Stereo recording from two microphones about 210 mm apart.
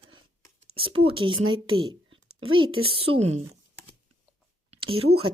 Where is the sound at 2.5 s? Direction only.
25° right (ahead or behind).